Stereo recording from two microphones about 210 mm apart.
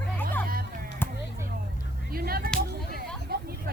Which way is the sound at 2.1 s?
45° right (ahead or behind).